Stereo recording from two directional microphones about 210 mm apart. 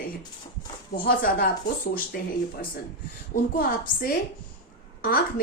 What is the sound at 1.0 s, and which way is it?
Speech, 45° left (ahead or behind).